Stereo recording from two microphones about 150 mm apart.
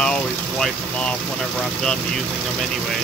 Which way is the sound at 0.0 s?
5° left (ahead or behind).